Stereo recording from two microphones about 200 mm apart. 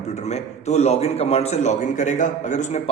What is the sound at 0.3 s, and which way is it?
A man's voice, 35° left (ahead or behind).